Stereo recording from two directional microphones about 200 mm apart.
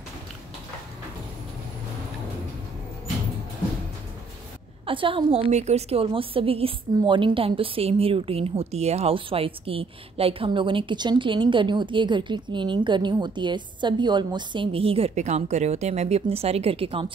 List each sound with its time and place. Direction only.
4.8 s a woman's voice: 25° right (ahead or behind)